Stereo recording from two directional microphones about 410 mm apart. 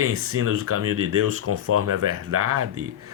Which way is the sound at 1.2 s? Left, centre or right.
Right.